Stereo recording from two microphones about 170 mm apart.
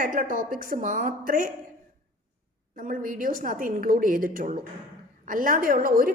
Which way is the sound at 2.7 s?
55° right (ahead or behind).